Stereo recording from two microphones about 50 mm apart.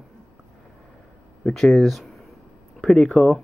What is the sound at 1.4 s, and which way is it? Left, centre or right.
Speech, centre.